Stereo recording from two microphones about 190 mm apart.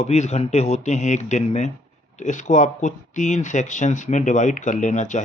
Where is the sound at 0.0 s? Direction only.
35° left (ahead or behind).